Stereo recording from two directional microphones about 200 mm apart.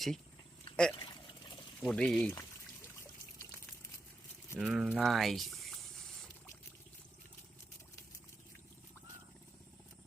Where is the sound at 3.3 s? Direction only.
5° left (ahead or behind).